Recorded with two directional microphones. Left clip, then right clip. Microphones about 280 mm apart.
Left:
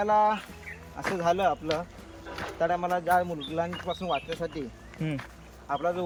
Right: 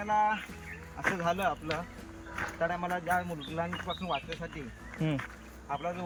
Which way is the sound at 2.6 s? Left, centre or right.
Centre.